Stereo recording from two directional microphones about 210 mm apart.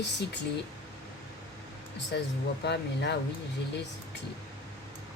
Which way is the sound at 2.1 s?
55° left (ahead or behind).